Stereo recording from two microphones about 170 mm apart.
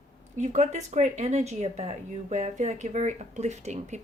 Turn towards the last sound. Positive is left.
turn(degrees=-40)  # may be behind; listen again after turning